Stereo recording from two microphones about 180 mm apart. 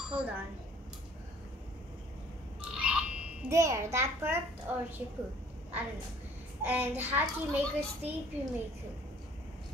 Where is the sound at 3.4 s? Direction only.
15° right (ahead or behind).